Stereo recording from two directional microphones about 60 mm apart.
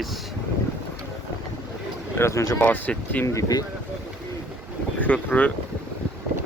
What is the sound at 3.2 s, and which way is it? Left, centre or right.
Speech, left.